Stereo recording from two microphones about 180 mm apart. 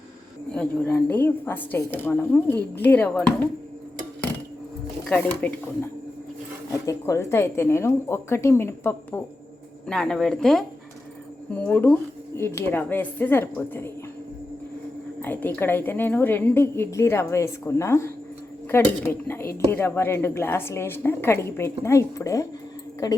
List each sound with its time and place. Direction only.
0.5 s a woman's voice: 5° left (ahead or behind)
5.0 s a woman's voice: 10° left (ahead or behind)
15.2 s a woman's voice: 10° left (ahead or behind)